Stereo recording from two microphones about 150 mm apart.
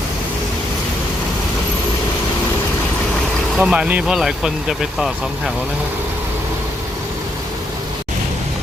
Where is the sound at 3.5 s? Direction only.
5° right (ahead or behind).